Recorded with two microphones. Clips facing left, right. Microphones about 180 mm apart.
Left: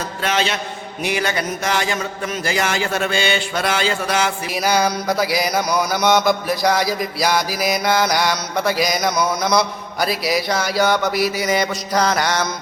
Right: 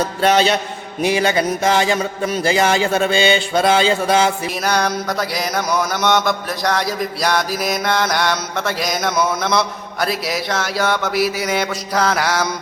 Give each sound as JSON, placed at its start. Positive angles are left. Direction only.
{"t": 0.2, "sound": "mantra", "side_deg": -35}
{"t": 1.0, "sound": "music", "side_deg": -25}
{"t": 4.6, "sound": "mantra", "side_deg": 5}